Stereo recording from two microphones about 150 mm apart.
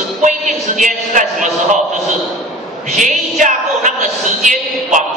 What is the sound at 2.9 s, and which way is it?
Music, 55° right (ahead or behind).